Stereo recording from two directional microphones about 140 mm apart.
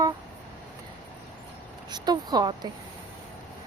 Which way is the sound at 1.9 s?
30° right (ahead or behind).